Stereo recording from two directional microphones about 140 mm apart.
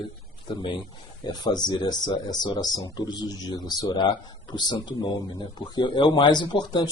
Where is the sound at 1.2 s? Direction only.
30° left (ahead or behind).